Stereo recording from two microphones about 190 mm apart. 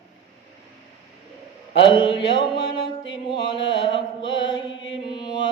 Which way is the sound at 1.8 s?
25° left (ahead or behind).